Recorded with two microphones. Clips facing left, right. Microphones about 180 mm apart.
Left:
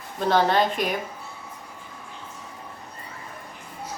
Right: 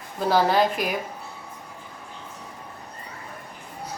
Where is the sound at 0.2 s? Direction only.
5° right (ahead or behind).